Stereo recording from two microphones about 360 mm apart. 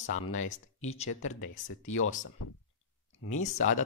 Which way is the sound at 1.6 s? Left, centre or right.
Left.